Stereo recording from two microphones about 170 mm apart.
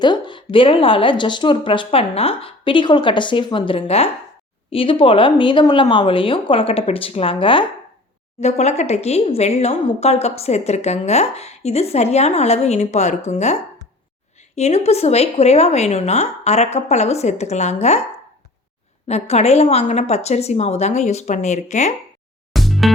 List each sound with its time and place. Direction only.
0.0 s speech: 25° left (ahead or behind)
8.4 s speech: 40° left (ahead or behind)
19.0 s speech: 40° left (ahead or behind)
22.5 s music: centre (ahead or behind)